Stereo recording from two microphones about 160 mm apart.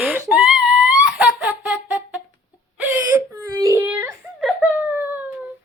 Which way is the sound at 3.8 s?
5° right (ahead or behind).